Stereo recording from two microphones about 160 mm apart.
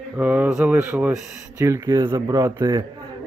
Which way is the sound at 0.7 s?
15° right (ahead or behind).